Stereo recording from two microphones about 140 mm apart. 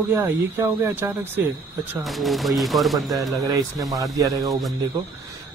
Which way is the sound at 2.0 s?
Centre (ahead or behind).